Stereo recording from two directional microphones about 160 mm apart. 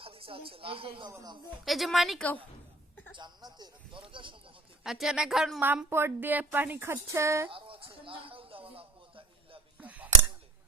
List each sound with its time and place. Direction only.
0.0 s speech: 35° right (ahead or behind)
1.6 s a woman's voice: centre (ahead or behind)
3.2 s speech: 25° right (ahead or behind)
4.8 s speech: centre (ahead or behind)
7.5 s a sound: 35° right (ahead or behind)
9.7 s a sound: 10° right (ahead or behind)